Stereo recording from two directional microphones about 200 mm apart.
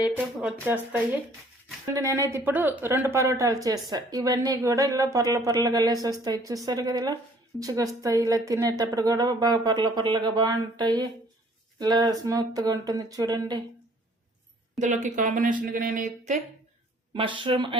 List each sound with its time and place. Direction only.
0.0 s speech: 5° right (ahead or behind)
14.8 s speech: 40° right (ahead or behind)
17.2 s speech: 25° right (ahead or behind)